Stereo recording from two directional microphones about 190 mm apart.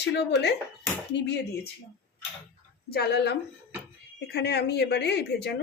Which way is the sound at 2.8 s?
55° left (ahead or behind).